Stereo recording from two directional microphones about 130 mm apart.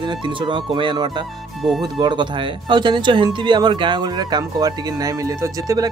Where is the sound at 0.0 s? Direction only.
35° right (ahead or behind).